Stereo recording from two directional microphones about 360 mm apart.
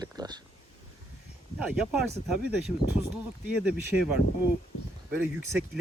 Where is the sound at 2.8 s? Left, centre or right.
Left.